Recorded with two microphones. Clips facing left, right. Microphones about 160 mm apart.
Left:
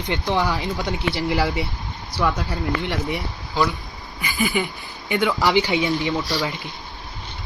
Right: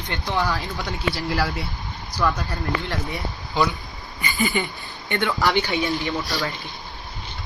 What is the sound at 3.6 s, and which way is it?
Speech, centre (ahead or behind).